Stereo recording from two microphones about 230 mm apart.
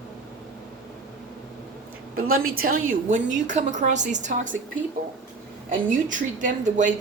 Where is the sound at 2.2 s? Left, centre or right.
Right.